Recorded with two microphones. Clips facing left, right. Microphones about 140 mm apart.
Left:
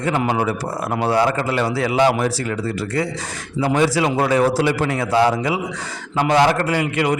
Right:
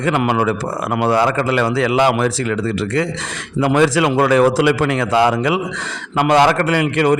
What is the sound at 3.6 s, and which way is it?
A man's voice, 90° right.